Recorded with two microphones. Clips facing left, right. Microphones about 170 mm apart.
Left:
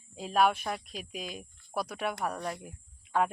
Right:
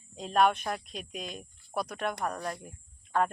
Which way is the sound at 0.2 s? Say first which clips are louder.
Right 1 dB; 5° left (ahead or behind).